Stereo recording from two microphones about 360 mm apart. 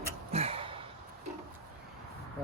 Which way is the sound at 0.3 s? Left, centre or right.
Centre.